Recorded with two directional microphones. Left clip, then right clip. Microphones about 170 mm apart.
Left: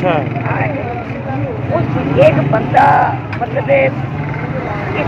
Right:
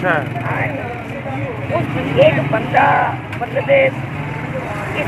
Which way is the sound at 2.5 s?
20° right (ahead or behind).